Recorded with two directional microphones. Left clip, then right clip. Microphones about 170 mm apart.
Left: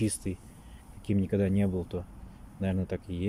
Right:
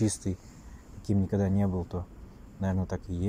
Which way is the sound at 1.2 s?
15° left (ahead or behind).